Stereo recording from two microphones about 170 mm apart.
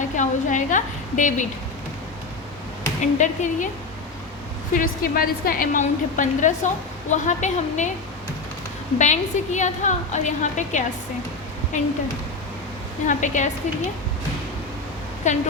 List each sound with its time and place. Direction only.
0.2 s a woman's voice: 50° left (ahead or behind)
3.2 s a woman's voice: 45° left (ahead or behind)
4.7 s a woman's voice: 55° left (ahead or behind)
9.0 s a woman's voice: 45° left (ahead or behind)
13.1 s a woman's voice: 45° left (ahead or behind)
15.3 s a woman's voice: 45° left (ahead or behind)